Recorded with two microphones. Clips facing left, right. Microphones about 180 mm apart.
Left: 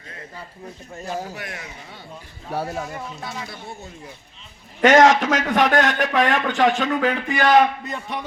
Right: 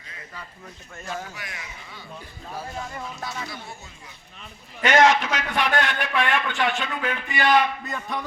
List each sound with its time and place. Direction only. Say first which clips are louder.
0.9 s a man's voice: left 5 dB; 35° left (ahead or behind)
1.4 s speech: left 5 dB; 55° left (ahead or behind)
2.5 s a man's voice: left 7 dB; 70° left (ahead or behind)
3.2 s speech: left 1 dB; 55° left (ahead or behind)
4.8 s a man's voice: left 5 dB; 45° left (ahead or behind)
7.0 s a man's voice: left 7 dB; 70° left (ahead or behind)
7.3 s a man's voice: left 4 dB; 45° left (ahead or behind)
7.9 s music: left 1 dB; 20° left (ahead or behind)